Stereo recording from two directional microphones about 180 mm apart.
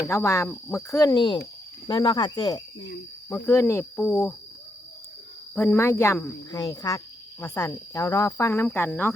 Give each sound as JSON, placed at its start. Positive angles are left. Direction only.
{"t": 0.0, "sound": "speech", "side_deg": 15}
{"t": 5.5, "sound": "speech", "side_deg": 15}